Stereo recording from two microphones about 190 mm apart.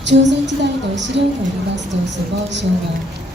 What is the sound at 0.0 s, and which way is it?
Music, 70° right (ahead or behind).